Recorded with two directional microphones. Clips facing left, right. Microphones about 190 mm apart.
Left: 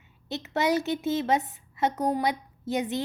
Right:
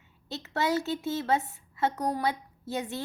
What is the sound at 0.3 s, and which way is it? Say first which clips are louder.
A woman's voice: left 3 dB; 20° left (ahead or behind).